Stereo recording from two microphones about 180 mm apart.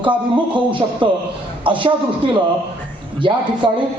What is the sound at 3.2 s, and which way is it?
Speech, 30° right (ahead or behind).